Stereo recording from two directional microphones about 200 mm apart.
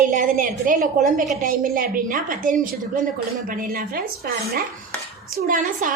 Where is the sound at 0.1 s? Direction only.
40° right (ahead or behind).